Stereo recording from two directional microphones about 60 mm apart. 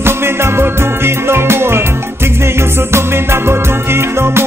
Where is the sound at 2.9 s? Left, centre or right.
Right.